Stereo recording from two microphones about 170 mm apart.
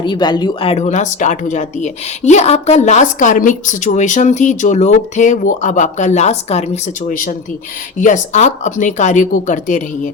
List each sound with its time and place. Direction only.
0.0 s speech: 25° left (ahead or behind)
7.9 s speech: 50° left (ahead or behind)